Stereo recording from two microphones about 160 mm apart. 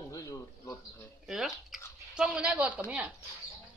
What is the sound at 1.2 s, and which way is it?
A woman's voice, centre (ahead or behind).